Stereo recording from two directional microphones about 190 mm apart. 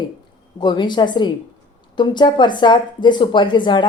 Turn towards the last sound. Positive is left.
turn(degrees=25)  # may be behind; listen again after turning